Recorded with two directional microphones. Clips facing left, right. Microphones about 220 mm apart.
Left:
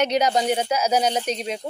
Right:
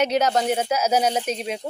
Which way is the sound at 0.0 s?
5° right (ahead or behind).